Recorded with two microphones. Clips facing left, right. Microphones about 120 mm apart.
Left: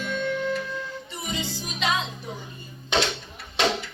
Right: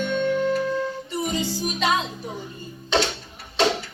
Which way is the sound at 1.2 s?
40° right (ahead or behind).